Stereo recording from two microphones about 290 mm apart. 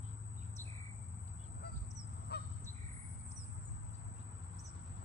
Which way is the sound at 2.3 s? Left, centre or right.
Left.